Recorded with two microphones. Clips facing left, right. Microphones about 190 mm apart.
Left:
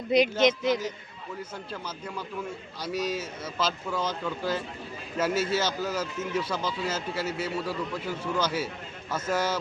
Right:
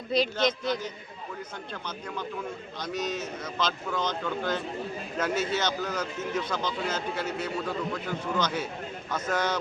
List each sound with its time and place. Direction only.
0.1 s a man's voice: 20° left (ahead or behind)
1.7 s a man's voice: 5° left (ahead or behind)